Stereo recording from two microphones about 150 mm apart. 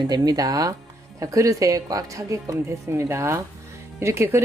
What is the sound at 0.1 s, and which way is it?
A woman's voice, 25° right (ahead or behind).